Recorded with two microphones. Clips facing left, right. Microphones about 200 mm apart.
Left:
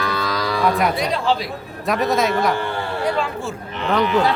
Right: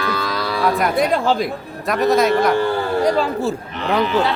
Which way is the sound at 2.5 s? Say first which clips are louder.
Right 6 dB; 40° right (ahead or behind).